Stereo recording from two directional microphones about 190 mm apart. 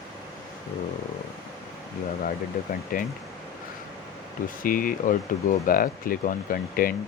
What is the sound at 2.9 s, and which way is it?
Speech, 50° left (ahead or behind).